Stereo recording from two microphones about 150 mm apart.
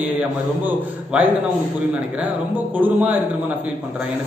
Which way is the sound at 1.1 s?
10° right (ahead or behind).